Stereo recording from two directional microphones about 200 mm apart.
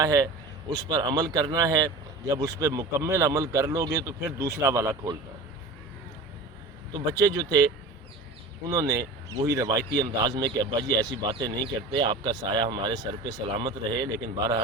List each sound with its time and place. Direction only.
0.0 s speech: 15° right (ahead or behind)
7.1 s a man's voice: 20° right (ahead or behind)
8.7 s a man's voice: 15° right (ahead or behind)